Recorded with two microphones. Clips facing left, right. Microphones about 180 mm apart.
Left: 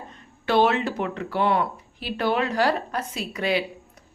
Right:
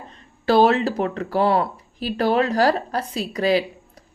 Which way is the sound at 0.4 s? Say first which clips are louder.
Right 4 dB; 35° right (ahead or behind).